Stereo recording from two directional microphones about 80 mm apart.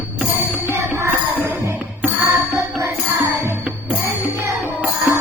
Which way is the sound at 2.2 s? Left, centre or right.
Right.